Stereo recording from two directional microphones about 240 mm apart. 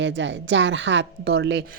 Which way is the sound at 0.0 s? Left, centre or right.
Right.